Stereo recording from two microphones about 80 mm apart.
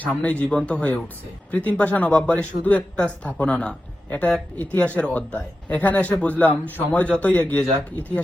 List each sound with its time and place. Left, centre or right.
0.2 s a man's voice: centre